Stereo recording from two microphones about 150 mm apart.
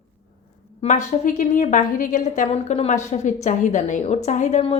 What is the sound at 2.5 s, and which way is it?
A woman's voice, 45° left (ahead or behind).